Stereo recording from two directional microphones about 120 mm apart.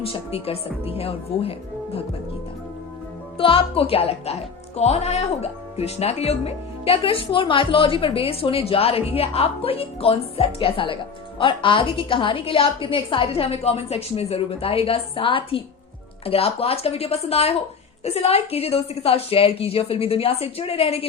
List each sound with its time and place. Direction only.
0.0 s speech: 50° left (ahead or behind)
3.3 s a woman's voice: 50° left (ahead or behind)